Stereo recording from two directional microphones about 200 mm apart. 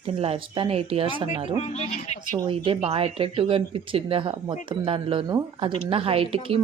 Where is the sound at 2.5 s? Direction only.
30° right (ahead or behind).